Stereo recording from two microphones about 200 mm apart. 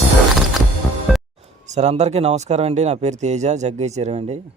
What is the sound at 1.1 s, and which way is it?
Music, centre (ahead or behind).